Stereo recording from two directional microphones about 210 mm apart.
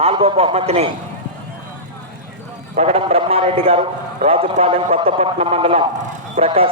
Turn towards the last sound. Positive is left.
turn(degrees=-25)  # may be behind; listen again after turning